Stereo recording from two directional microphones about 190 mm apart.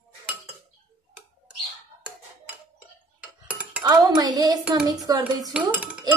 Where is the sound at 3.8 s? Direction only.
20° right (ahead or behind).